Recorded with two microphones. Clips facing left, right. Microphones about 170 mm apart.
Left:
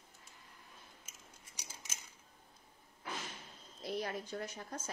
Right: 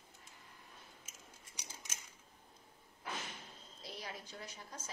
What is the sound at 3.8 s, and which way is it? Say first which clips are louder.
A woman's voice: left 9 dB; 55° left (ahead or behind).